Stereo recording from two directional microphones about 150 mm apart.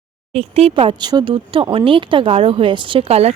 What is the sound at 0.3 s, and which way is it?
Speech, 45° right (ahead or behind).